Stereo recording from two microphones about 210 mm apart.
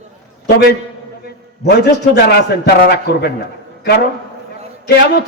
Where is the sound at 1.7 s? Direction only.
50° left (ahead or behind).